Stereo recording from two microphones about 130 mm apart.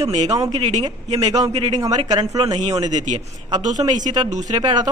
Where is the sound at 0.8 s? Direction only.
30° right (ahead or behind).